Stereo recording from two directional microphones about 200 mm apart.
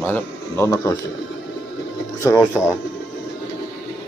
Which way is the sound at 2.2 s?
15° left (ahead or behind).